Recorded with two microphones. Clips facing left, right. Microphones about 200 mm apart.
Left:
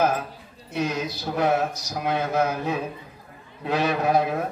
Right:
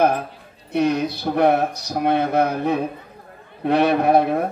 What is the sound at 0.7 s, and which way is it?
Speech, 60° right (ahead or behind).